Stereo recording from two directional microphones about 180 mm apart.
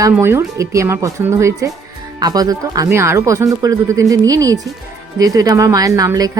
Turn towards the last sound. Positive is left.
turn(degrees=-20)  # may be behind; listen again after turning